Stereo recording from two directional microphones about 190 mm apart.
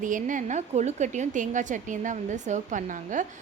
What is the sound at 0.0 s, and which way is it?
A woman's voice, 45° right (ahead or behind).